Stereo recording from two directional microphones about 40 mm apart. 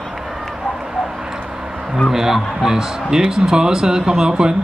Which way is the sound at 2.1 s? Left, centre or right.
Centre.